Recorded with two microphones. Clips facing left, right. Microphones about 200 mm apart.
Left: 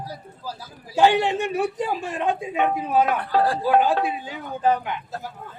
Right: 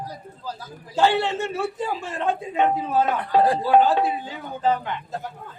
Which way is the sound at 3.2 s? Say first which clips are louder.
Right 2 dB; 20° right (ahead or behind).